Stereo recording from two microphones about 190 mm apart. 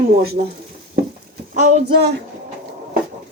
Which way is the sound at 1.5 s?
40° right (ahead or behind).